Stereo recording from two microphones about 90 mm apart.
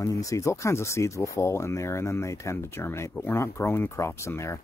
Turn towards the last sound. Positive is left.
turn(degrees=30)  # may be behind; listen again after turning